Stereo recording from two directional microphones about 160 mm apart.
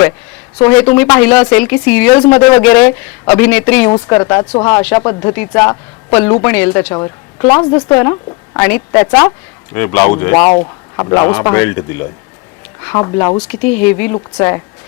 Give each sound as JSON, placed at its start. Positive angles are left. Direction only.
{"t": 0.5, "sound": "speech", "side_deg": 10}